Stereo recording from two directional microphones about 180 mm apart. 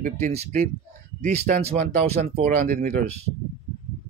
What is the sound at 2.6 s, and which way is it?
Speech, 50° right (ahead or behind).